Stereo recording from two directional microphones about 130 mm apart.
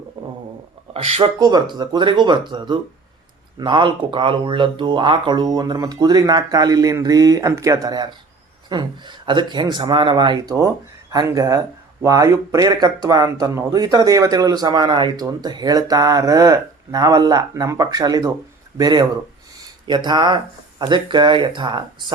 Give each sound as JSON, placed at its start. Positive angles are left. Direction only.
{"t": 0.2, "sound": "stomach rumble", "side_deg": -40}
{"t": 1.4, "sound": "speech", "side_deg": -30}